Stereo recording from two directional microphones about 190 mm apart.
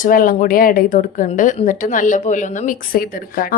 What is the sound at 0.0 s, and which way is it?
Speech, 45° left (ahead or behind).